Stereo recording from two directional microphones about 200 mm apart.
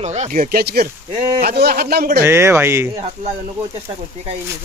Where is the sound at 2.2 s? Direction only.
10° right (ahead or behind).